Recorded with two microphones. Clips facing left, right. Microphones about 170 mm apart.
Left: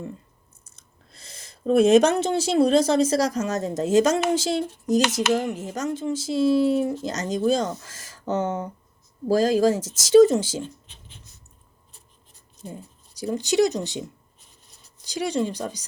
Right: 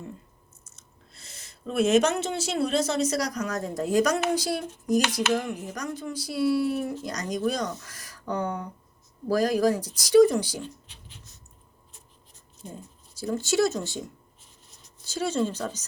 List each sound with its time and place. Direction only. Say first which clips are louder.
1.2 s speech: left 8 dB; 35° left (ahead or behind)
13.1 s speech: left 3 dB; 15° left (ahead or behind)
15.0 s speech: left 2 dB; 15° left (ahead or behind)